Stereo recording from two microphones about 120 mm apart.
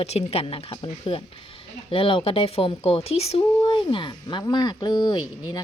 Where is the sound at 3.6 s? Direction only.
40° left (ahead or behind).